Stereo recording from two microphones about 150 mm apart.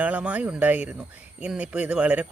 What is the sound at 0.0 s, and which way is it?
Speech, 10° right (ahead or behind).